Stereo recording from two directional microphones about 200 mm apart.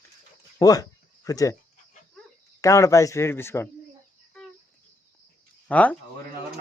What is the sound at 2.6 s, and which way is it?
Speech, 15° left (ahead or behind).